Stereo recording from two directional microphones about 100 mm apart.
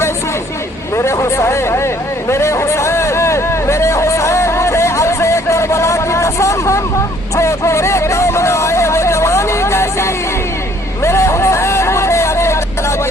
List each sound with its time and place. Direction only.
0.9 s speech: 30° left (ahead or behind)
2.3 s hubbub: 30° left (ahead or behind)
7.3 s a sound: 30° left (ahead or behind)
11.0 s vehicle: 25° left (ahead or behind)